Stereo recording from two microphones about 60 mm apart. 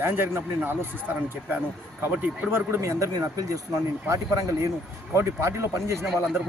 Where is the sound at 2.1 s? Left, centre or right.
Right.